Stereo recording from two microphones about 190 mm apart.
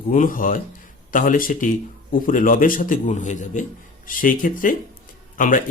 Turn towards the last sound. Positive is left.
turn(degrees=45)  # may be behind; listen again after turning